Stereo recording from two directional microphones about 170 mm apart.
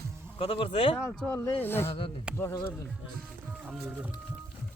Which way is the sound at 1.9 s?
30° left (ahead or behind).